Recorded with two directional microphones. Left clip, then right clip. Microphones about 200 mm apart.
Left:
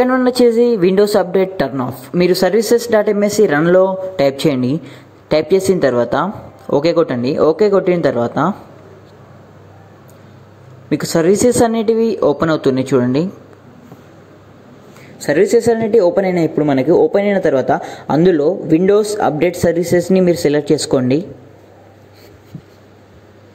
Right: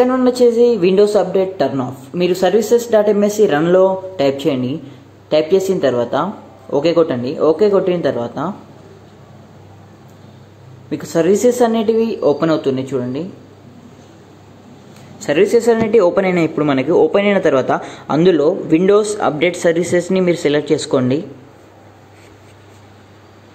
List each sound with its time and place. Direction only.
0.0 s a woman's voice: 35° left (ahead or behind)
10.9 s a woman's voice: 30° left (ahead or behind)
15.1 s a man's voice: 25° left (ahead or behind)